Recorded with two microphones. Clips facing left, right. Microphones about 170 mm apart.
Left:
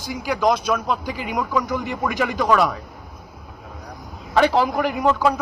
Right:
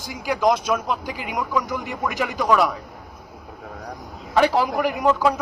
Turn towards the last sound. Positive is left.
turn(degrees=-5)  # may be behind; listen again after turning